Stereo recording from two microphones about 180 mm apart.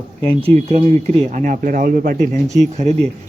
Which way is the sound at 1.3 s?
45° right (ahead or behind).